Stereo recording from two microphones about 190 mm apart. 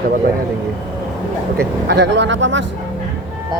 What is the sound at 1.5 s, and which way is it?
Speech, 65° right (ahead or behind).